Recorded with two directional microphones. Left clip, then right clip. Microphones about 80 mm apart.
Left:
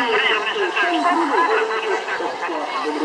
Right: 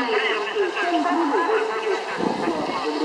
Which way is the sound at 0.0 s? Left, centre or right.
Left.